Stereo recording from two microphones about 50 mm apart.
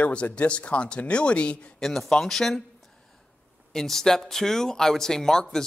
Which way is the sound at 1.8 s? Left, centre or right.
Centre.